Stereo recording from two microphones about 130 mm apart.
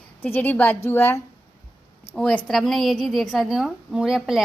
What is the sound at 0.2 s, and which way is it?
A woman's voice, 15° left (ahead or behind).